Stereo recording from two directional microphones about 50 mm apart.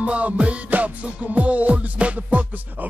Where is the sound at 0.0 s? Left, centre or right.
Right.